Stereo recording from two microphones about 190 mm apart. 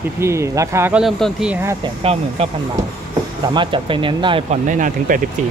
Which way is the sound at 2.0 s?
30° right (ahead or behind).